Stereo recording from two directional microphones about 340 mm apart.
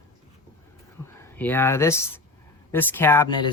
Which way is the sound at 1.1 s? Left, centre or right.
Centre.